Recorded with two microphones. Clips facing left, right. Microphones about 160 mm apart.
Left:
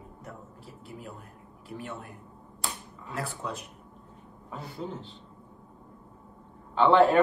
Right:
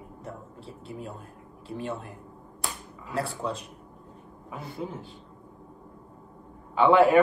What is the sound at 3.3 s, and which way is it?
Speech, 30° right (ahead or behind).